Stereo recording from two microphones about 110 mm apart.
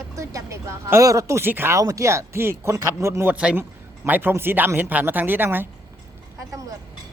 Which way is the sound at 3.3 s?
10° right (ahead or behind).